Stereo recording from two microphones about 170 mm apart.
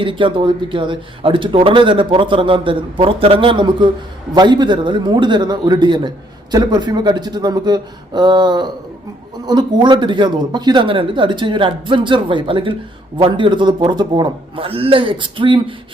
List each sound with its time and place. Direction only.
0.0 s speech: 30° right (ahead or behind)